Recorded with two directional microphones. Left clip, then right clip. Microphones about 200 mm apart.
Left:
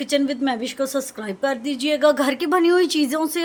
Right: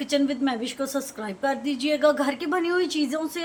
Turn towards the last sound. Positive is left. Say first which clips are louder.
# left 5 dB
turn(degrees=45)  # may be behind; listen again after turning